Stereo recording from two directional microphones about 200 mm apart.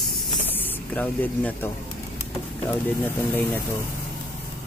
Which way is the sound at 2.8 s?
10° left (ahead or behind).